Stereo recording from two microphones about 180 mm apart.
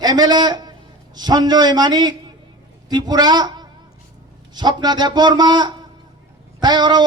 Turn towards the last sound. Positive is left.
turn(degrees=-25)  # may be behind; listen again after turning